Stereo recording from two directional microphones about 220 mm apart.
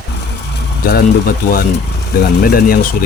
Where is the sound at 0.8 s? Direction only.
45° left (ahead or behind).